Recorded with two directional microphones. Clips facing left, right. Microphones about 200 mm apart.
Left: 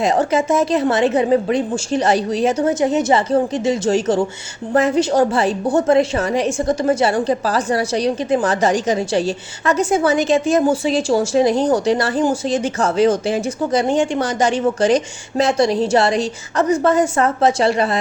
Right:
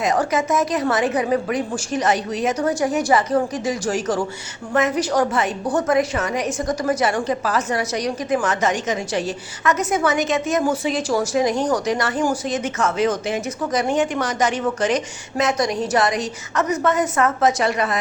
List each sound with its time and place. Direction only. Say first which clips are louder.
0.0 s a woman's voice: left 4 dB; 30° left (ahead or behind)